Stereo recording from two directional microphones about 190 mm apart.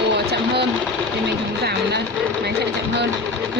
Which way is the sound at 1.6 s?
60° right (ahead or behind).